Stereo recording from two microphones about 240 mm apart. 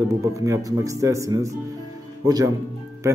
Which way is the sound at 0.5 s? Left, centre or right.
Centre.